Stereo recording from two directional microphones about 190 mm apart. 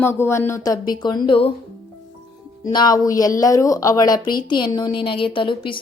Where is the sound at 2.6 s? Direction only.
20° left (ahead or behind).